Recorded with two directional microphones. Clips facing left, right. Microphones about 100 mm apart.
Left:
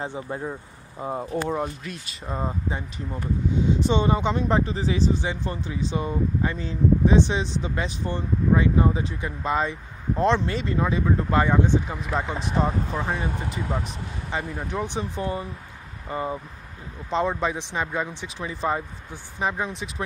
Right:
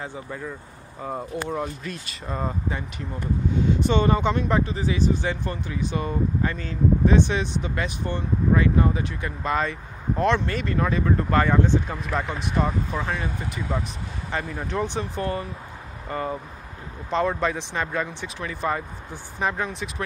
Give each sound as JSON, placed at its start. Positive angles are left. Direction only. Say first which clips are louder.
{"t": 0.3, "sound": "speech", "louder": "left 3 dB", "side_deg": 35}
{"t": 1.9, "sound": "speech", "louder": "right 1 dB", "side_deg": 15}
{"t": 3.8, "sound": "speech", "louder": "right 2 dB", "side_deg": 20}
{"t": 5.2, "sound": "speech", "louder": "right 1 dB", "side_deg": 20}
{"t": 14.3, "sound": "speech", "louder": "right 1 dB", "side_deg": 15}